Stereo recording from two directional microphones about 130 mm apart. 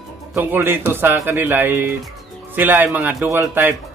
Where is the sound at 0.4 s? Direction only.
15° right (ahead or behind).